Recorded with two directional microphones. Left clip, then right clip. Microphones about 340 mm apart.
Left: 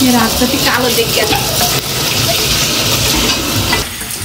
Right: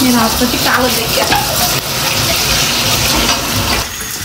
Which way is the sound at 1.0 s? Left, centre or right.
Centre.